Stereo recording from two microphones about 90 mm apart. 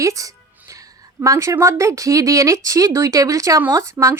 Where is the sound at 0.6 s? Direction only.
40° right (ahead or behind).